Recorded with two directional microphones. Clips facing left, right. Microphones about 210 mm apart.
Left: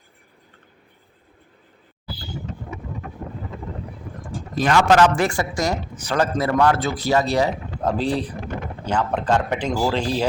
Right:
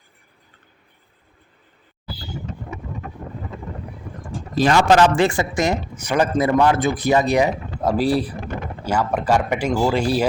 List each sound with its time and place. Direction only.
4.5 s speech: 30° right (ahead or behind); by 10.2 s 10° right (ahead or behind)